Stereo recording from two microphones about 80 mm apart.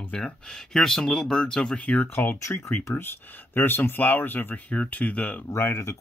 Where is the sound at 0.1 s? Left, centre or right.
Centre.